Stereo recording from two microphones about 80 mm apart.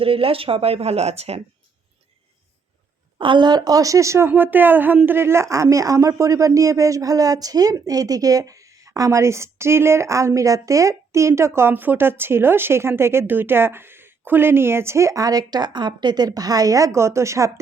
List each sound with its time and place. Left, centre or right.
0.5 s speech: right
3.2 s a woman's voice: right
4.3 s speech: right